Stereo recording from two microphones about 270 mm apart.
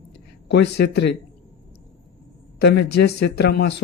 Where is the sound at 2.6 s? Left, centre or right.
Left.